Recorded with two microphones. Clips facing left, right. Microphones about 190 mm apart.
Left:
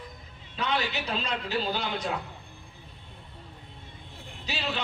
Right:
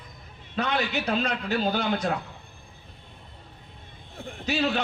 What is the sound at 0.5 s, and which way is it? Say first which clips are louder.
A man's voice: right 3 dB; 50° right (ahead or behind).